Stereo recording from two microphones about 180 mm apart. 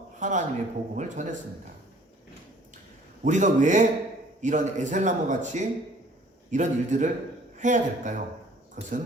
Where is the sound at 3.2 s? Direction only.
40° right (ahead or behind).